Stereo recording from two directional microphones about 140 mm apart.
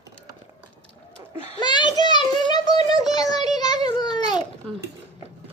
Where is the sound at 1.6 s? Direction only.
30° left (ahead or behind).